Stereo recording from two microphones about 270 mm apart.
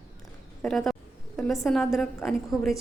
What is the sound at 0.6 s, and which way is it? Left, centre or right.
A woman's voice, centre.